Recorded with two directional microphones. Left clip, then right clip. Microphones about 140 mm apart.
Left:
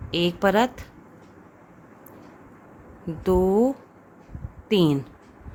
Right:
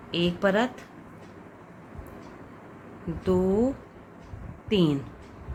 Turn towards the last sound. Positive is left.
turn(degrees=90)